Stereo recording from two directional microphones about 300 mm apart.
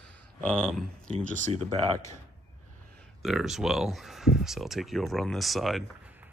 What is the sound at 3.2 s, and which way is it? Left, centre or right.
Speech, centre.